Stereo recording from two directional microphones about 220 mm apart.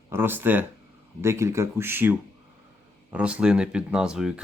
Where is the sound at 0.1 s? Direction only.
10° right (ahead or behind).